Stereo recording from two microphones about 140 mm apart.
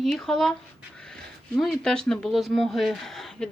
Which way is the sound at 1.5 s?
Centre (ahead or behind).